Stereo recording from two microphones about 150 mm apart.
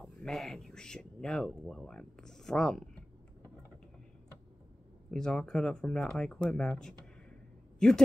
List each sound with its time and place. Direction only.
0.0 s speech: centre (ahead or behind)
5.1 s speech: 5° left (ahead or behind)